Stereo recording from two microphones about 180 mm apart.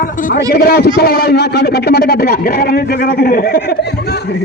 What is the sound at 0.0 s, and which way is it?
A man's voice, 50° left (ahead or behind).